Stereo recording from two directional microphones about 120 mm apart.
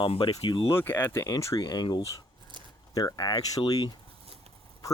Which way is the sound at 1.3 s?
30° left (ahead or behind).